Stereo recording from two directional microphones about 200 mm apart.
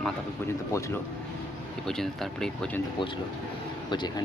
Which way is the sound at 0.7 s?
15° left (ahead or behind).